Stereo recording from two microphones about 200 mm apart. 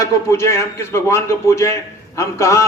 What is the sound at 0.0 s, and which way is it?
A man's voice, 15° left (ahead or behind).